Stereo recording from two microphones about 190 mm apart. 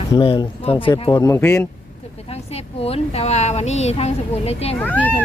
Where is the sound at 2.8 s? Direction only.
30° left (ahead or behind).